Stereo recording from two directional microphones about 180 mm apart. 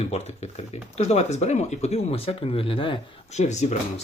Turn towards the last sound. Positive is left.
turn(degrees=40)  # may be behind; listen again after turning